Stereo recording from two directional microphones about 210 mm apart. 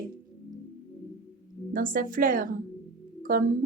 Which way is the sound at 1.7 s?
40° right (ahead or behind).